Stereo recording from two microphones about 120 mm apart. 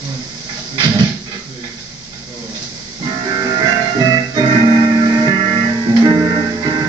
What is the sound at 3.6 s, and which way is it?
Music, 30° right (ahead or behind).